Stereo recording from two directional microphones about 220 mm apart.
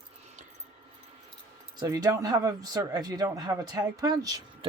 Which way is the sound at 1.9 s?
15° right (ahead or behind).